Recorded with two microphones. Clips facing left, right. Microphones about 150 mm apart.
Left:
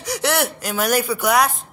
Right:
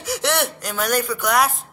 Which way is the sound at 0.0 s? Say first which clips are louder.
Left 1 dB; centre (ahead or behind).